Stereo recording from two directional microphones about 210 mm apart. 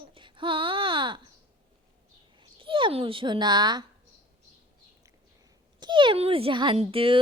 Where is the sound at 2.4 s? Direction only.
25° right (ahead or behind).